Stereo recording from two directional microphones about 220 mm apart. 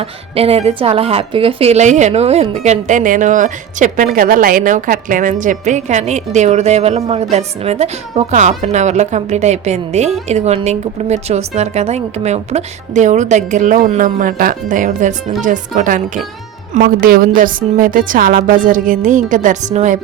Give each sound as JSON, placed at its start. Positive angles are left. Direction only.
{"t": 0.0, "sound": "a woman's voice", "side_deg": -25}